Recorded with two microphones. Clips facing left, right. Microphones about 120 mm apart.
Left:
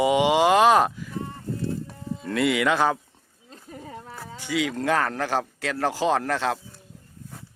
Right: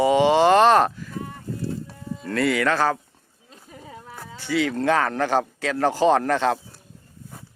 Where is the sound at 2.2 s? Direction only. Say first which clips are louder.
Right 1 dB; 15° left (ahead or behind).